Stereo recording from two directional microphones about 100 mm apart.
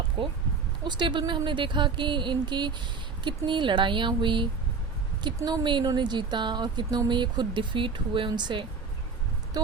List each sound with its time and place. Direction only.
0.9 s speech: 50° right (ahead or behind)
5.5 s speech: 50° right (ahead or behind)